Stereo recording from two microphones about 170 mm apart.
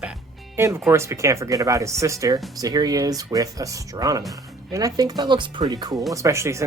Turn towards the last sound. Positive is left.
turn(degrees=-15)  # may be behind; listen again after turning